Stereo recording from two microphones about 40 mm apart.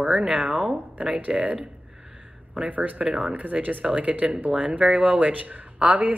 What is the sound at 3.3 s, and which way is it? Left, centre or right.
A woman's voice, right.